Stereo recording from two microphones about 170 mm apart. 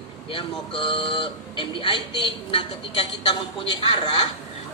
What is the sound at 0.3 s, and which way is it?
Speech, 30° left (ahead or behind).